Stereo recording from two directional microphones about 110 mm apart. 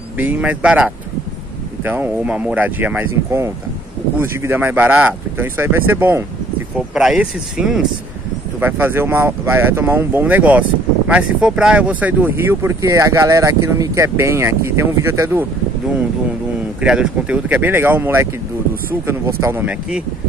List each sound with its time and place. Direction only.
0.2 s speech: 15° right (ahead or behind)
6.9 s speech: 5° right (ahead or behind)
8.5 s speech: 20° right (ahead or behind)
16.8 s speech: 5° right (ahead or behind); by 19.6 s 25° right (ahead or behind)
19.6 s speech: 10° right (ahead or behind)